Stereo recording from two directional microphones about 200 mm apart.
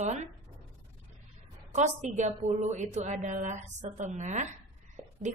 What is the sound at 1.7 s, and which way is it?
Speech, 35° right (ahead or behind).